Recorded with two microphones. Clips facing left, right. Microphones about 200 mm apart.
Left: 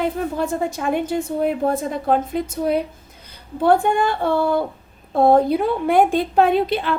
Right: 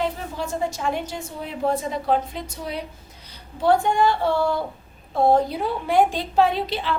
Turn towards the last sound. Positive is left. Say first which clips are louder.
# left 5 dB
turn(degrees=55)  # may be behind; listen again after turning